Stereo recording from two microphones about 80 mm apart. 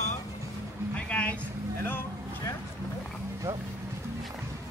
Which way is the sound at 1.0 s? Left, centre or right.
Centre.